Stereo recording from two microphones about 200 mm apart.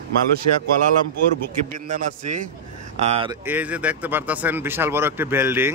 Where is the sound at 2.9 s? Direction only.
30° right (ahead or behind).